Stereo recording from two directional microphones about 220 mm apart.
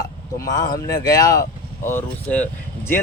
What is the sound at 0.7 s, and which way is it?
Speech, 15° left (ahead or behind).